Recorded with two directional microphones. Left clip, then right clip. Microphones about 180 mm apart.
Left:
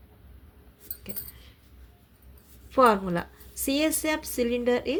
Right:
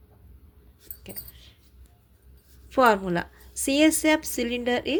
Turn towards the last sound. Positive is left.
turn(degrees=-25)  # may be behind; listen again after turning